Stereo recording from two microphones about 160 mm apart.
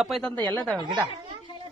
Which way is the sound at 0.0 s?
Centre (ahead or behind).